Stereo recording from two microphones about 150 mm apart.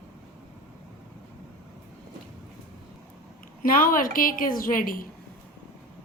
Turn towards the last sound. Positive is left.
turn(degrees=70)  # may be behind; listen again after turning